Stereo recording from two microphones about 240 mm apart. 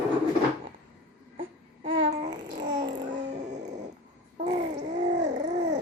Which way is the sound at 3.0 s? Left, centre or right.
Right.